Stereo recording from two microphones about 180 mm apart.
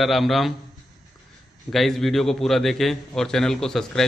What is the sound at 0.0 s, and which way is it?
Speech, centre (ahead or behind).